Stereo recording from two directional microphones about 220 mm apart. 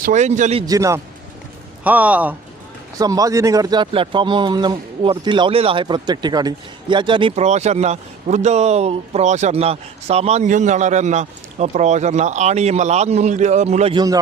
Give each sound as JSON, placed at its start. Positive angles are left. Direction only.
{"t": 0.0, "sound": "speech", "side_deg": -35}
{"t": 0.6, "sound": "a man's voice", "side_deg": -15}